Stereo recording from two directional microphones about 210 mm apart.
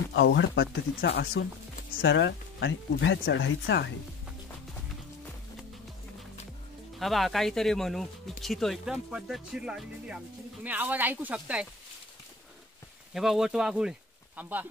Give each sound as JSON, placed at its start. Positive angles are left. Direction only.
{"t": 0.1, "sound": "speech", "side_deg": 60}
{"t": 2.0, "sound": "speech", "side_deg": 60}
{"t": 7.0, "sound": "speech", "side_deg": 0}
{"t": 13.1, "sound": "speech", "side_deg": 0}